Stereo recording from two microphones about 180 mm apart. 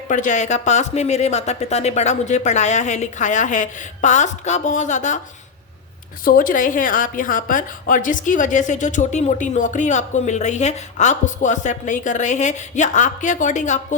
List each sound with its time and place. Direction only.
0.1 s speech: 45° left (ahead or behind)
6.2 s a woman's voice: 50° left (ahead or behind)